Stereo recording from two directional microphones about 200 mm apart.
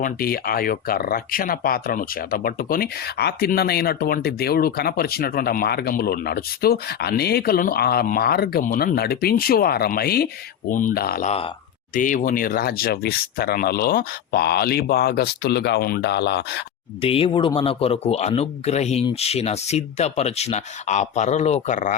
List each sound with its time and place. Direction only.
0.0 s speech: 50° left (ahead or behind)
17.0 s a man's voice: 25° left (ahead or behind)